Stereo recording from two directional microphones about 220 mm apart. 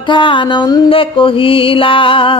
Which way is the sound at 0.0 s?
20° left (ahead or behind).